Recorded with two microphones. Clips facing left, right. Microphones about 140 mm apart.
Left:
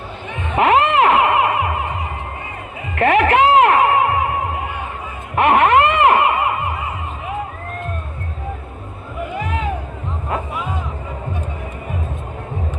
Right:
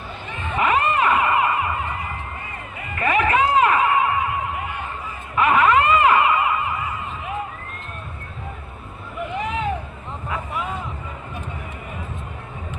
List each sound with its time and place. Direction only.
0.5 s music: 80° left
2.9 s music: 70° left (ahead or behind)
5.3 s a sound: 70° left (ahead or behind)